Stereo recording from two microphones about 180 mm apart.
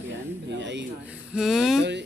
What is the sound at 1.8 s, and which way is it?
Speech, 75° right (ahead or behind).